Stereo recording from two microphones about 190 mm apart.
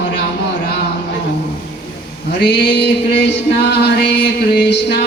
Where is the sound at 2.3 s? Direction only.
65° left (ahead or behind).